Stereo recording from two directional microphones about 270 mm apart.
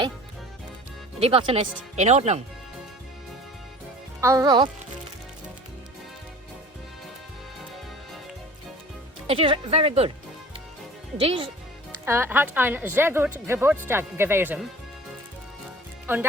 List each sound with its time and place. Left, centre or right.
1.2 s speech: right
4.2 s speech: centre
9.2 s speech: right
11.2 s speech: centre
12.0 s speech: centre
16.1 s speech: centre